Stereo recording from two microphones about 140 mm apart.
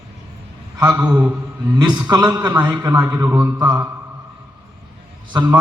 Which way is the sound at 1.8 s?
30° right (ahead or behind).